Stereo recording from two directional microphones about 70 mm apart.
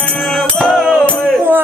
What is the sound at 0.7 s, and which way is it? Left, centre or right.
Music, centre.